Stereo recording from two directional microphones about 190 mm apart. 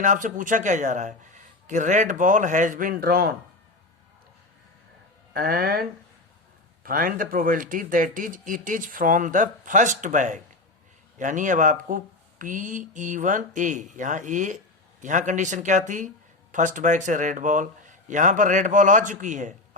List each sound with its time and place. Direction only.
0.0 s speech: 45° right (ahead or behind)
5.3 s speech: 50° right (ahead or behind)
6.8 s speech: 45° right (ahead or behind)